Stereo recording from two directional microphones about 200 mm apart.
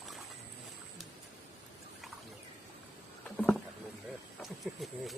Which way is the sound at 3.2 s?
5° left (ahead or behind).